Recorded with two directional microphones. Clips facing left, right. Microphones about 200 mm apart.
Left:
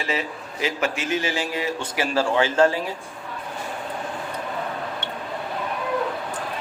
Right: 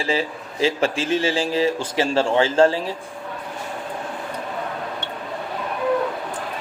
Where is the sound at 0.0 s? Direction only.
30° right (ahead or behind).